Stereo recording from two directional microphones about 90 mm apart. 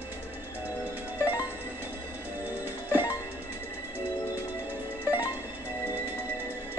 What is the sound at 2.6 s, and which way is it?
Music, 20° right (ahead or behind).